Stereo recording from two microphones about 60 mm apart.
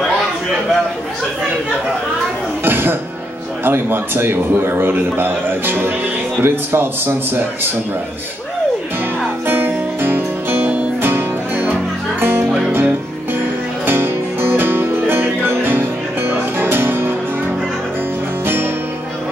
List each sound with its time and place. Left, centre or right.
2.6 s music: right
3.6 s a man's voice: right
9.5 s music: right
18.4 s music: right